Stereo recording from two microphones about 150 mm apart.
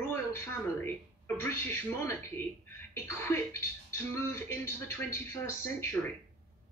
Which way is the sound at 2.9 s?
15° left (ahead or behind).